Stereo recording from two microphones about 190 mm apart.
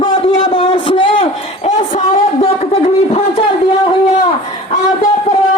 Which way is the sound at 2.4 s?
30° left (ahead or behind).